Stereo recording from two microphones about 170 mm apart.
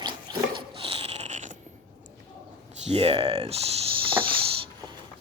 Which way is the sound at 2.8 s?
35° right (ahead or behind).